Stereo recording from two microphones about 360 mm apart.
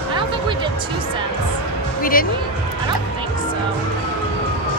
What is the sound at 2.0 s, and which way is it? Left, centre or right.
Music, left.